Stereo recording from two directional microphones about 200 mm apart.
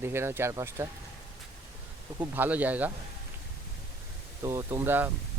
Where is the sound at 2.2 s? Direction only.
10° right (ahead or behind).